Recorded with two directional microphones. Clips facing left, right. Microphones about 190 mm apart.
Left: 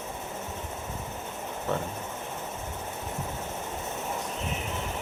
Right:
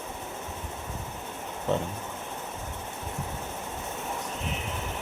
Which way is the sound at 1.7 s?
20° right (ahead or behind).